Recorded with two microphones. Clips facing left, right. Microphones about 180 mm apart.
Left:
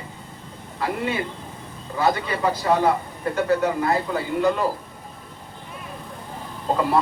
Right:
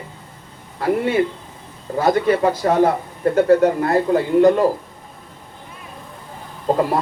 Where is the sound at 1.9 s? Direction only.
45° right (ahead or behind).